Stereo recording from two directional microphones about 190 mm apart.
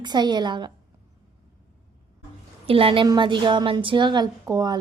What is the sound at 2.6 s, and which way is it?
A woman's voice, 30° right (ahead or behind).